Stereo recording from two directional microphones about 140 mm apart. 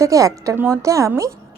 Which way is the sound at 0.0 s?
25° right (ahead or behind).